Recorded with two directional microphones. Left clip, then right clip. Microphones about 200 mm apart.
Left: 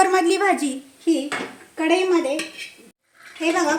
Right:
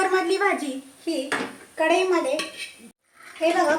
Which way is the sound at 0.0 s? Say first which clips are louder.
Left 4 dB; 45° left (ahead or behind).